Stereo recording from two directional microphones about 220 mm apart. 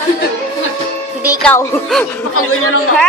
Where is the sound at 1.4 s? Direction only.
5° left (ahead or behind).